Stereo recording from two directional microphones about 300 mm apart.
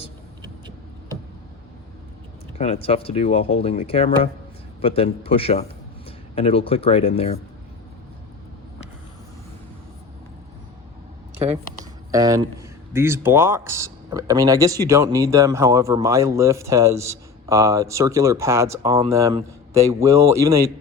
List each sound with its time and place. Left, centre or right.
2.6 s speech: centre
12.1 s speech: centre